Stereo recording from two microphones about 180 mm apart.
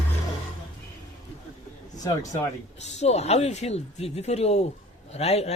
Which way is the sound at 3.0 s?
35° left (ahead or behind).